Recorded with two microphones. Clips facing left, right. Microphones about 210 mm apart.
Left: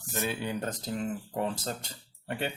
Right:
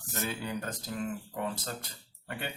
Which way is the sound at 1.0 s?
30° left (ahead or behind).